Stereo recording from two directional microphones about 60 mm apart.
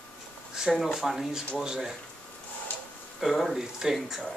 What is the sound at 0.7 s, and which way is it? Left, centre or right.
Speech, centre.